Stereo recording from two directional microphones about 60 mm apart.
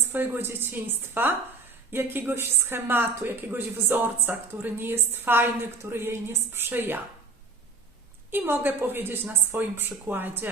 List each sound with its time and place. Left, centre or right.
0.1 s a woman's voice: right
8.3 s a woman's voice: right